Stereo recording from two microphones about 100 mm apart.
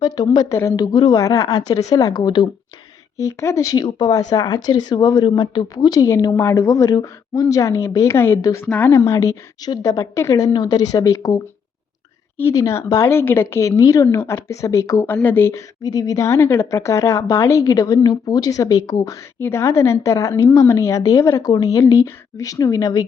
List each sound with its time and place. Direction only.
0.0 s speech: 40° left (ahead or behind)
0.5 s a woman's voice: 30° left (ahead or behind)
0.9 s speech: 45° left (ahead or behind)
1.2 s speech: 35° left (ahead or behind); by 2.5 s 50° left (ahead or behind)
3.2 s a woman's voice: 30° left (ahead or behind)
3.8 s speech: 45° left (ahead or behind)
6.0 s speech: 35° left (ahead or behind)
8.4 s speech: 35° left (ahead or behind)
8.6 s a woman's voice: 20° left (ahead or behind)
15.8 s a woman's voice: 40° left (ahead or behind)